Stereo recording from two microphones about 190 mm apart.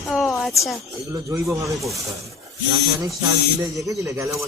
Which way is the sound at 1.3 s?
15° right (ahead or behind).